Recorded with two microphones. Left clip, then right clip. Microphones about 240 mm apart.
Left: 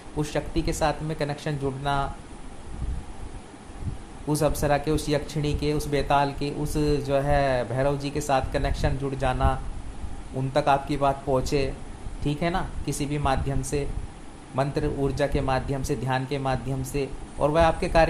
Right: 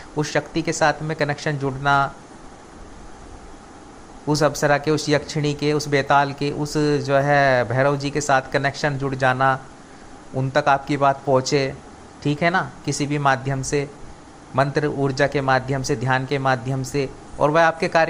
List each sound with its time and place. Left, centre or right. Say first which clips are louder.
0.2 s speech: right 6 dB; centre
4.3 s speech: right 5 dB; centre